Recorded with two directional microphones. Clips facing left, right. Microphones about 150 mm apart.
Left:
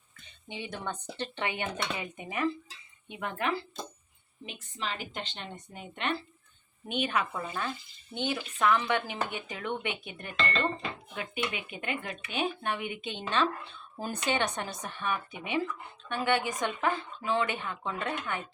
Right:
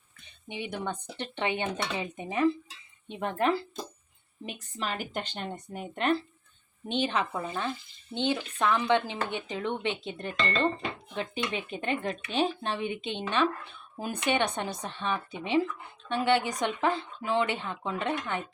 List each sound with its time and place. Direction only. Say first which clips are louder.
0.4 s a woman's voice: right 3 dB; 20° right (ahead or behind); by 3.5 s 35° right (ahead or behind)
4.4 s speech: right 3 dB; 45° right (ahead or behind)
6.8 s speech: right 2 dB; 25° right (ahead or behind)